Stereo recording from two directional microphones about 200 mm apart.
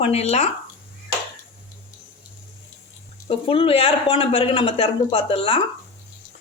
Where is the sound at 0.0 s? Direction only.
30° left (ahead or behind).